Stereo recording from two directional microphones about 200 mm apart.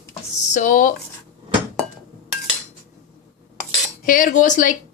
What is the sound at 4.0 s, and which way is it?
Speech, 40° left (ahead or behind).